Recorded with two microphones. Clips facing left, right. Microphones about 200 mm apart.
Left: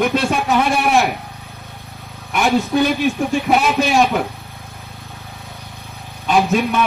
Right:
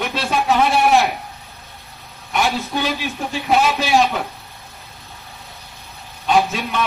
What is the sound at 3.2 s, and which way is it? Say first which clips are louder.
A man's voice: right 3 dB; 50° left (ahead or behind).